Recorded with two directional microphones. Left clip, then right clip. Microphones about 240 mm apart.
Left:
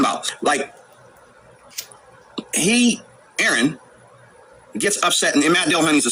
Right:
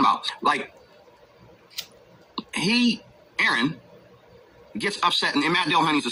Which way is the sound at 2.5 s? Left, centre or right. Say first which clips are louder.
Left 5 dB; left.